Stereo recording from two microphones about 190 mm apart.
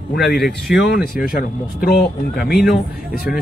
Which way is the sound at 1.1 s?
50° left (ahead or behind).